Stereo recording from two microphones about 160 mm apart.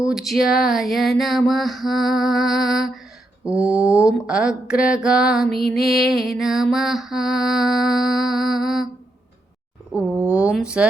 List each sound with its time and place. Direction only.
0.0 s mantra: centre (ahead or behind)
3.4 s speech: 10° right (ahead or behind)
4.3 s mantra: 5° right (ahead or behind)
9.9 s speech: 10° right (ahead or behind)